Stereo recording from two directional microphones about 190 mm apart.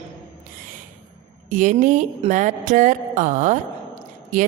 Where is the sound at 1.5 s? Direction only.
45° right (ahead or behind).